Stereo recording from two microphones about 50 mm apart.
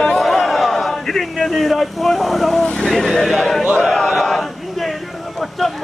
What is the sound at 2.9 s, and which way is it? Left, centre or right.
Speech, centre.